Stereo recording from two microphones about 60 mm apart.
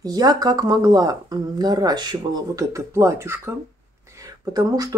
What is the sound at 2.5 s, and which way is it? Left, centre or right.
Speech, right.